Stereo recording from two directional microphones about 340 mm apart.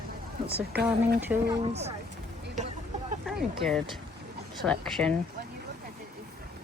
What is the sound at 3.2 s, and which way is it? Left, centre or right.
Speech, centre.